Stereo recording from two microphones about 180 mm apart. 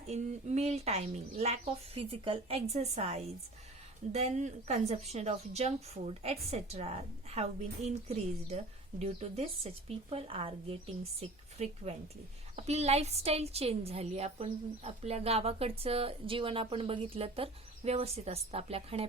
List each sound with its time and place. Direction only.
0.1 s a woman's voice: 40° right (ahead or behind)